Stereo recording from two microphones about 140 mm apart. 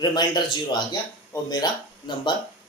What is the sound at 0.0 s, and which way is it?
Speech, 30° left (ahead or behind).